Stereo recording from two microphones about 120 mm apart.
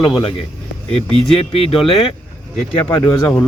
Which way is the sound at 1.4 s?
55° left (ahead or behind).